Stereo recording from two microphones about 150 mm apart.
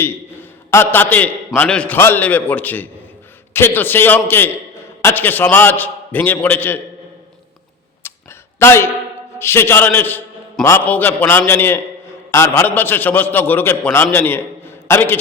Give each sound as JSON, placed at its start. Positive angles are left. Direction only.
{"t": 0.0, "sound": "a man's voice", "side_deg": 15}
{"t": 8.0, "sound": "a sound", "side_deg": 15}
{"t": 8.5, "sound": "a man's voice", "side_deg": 15}